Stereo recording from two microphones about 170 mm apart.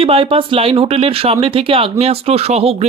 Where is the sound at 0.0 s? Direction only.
30° right (ahead or behind).